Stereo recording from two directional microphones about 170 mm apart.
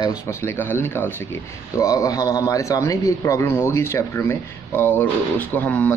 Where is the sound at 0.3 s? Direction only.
15° left (ahead or behind).